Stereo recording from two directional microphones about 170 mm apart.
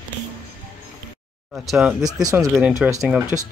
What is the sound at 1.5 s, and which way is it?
Speech, centre (ahead or behind).